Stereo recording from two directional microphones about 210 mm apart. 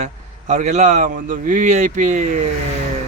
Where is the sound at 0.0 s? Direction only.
35° right (ahead or behind).